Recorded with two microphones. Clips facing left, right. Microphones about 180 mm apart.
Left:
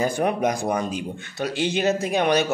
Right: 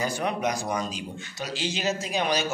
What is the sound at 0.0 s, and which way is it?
Speech, 50° left (ahead or behind).